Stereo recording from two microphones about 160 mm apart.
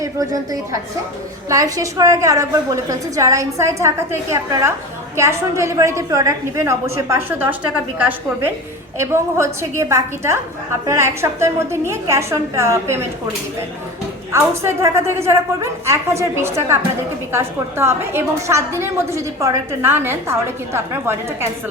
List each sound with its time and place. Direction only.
0.0 s a woman's voice: 20° right (ahead or behind)
14.3 s a woman's voice: 15° right (ahead or behind)